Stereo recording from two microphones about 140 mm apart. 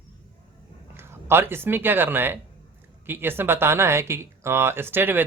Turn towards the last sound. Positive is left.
turn(degrees=-15)  # may be behind; listen again after turning